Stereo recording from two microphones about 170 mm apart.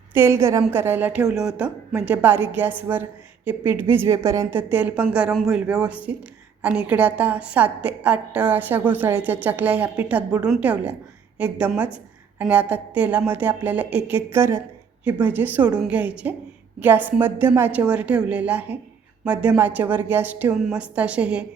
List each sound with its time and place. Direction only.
0.1 s a woman's voice: 15° right (ahead or behind)